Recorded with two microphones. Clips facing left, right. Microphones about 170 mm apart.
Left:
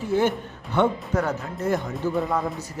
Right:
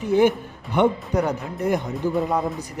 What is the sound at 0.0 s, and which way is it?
A man's voice, 15° right (ahead or behind).